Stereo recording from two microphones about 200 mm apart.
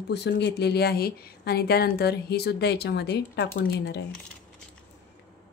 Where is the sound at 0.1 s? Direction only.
55° left (ahead or behind).